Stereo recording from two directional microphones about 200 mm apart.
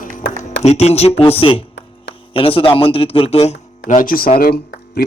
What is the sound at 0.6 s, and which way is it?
Music, 35° left (ahead or behind).